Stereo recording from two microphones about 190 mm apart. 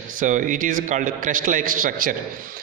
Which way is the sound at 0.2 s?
45° right (ahead or behind).